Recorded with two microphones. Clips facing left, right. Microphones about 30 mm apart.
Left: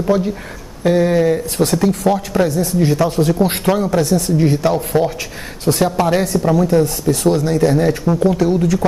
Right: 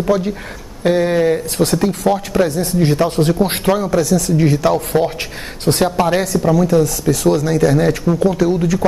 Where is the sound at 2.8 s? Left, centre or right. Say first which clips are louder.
Right 1 dB; right.